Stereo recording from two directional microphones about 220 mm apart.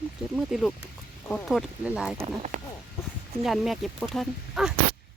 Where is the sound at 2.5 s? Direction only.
35° right (ahead or behind).